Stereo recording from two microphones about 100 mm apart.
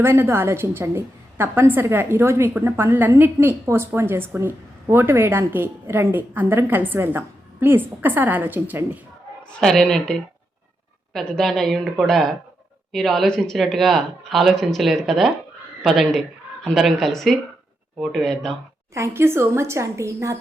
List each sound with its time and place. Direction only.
0.0 s a woman's voice: 25° right (ahead or behind)
9.5 s speech: 5° left (ahead or behind)
18.9 s a woman's voice: 25° right (ahead or behind)